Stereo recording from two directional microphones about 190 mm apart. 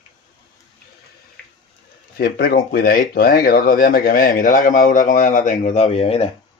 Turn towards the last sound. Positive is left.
turn(degrees=30)  # may be behind; listen again after turning